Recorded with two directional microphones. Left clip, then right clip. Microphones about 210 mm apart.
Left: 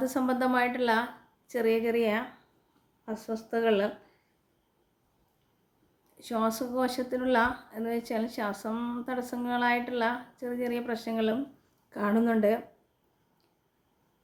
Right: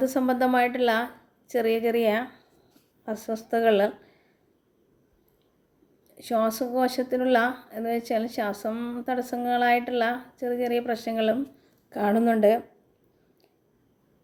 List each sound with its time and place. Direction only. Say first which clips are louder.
0.0 s speech: right 5 dB; 10° right (ahead or behind)
6.1 s speech: right 5 dB; 15° right (ahead or behind)